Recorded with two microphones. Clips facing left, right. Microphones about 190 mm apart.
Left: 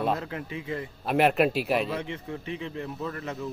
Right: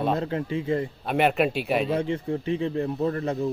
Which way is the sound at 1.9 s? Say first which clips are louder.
Right 7 dB; 35° right (ahead or behind).